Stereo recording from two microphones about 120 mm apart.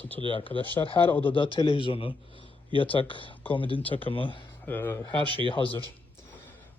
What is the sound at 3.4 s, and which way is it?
Speech, 15° left (ahead or behind).